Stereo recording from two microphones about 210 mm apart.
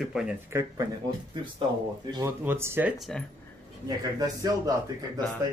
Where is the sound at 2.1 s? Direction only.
15° right (ahead or behind).